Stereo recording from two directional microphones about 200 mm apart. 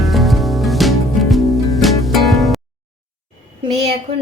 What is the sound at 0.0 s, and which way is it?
Music, centre (ahead or behind).